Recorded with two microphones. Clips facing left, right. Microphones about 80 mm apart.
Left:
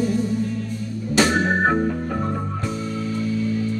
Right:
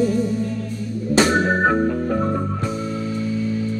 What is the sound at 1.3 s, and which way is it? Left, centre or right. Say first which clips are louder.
Music: right 2 dB; right.